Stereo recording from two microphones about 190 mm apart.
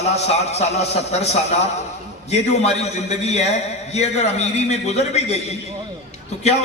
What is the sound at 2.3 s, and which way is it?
A man's voice, 35° left (ahead or behind).